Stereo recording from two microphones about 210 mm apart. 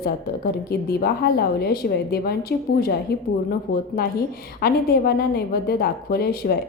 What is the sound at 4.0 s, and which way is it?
A woman's voice, 45° left (ahead or behind).